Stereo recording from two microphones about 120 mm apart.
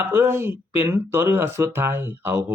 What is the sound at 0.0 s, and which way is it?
Speech, 20° right (ahead or behind).